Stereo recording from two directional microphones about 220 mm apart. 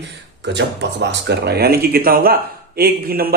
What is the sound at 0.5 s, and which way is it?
Speech, 55° right (ahead or behind).